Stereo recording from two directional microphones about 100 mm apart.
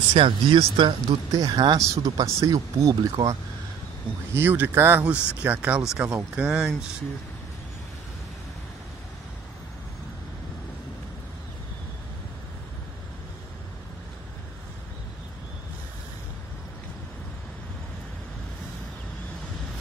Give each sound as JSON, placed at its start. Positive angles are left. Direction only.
{"t": 0.1, "sound": "speech", "side_deg": -60}
{"t": 1.3, "sound": "speech", "side_deg": -40}
{"t": 1.8, "sound": "speech", "side_deg": -30}
{"t": 4.3, "sound": "speech", "side_deg": -25}
{"t": 5.0, "sound": "speech", "side_deg": -10}